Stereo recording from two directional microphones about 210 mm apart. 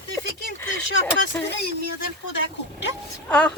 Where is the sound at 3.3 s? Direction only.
5° left (ahead or behind).